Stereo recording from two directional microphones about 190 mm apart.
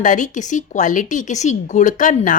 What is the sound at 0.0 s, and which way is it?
A woman's voice, 40° left (ahead or behind).